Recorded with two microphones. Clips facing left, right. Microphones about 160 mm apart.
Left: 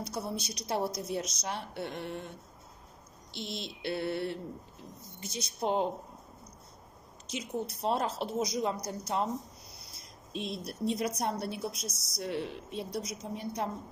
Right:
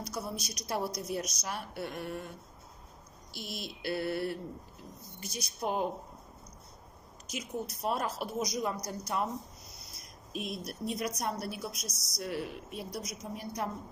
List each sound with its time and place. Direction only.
0.0 s a woman's voice: 30° left (ahead or behind)
3.3 s a woman's voice: 25° left (ahead or behind)
7.2 s a woman's voice: 30° left (ahead or behind)